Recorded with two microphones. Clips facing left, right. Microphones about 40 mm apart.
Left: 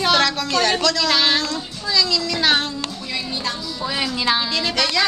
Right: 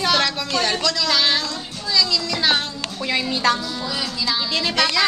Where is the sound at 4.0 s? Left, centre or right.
Left.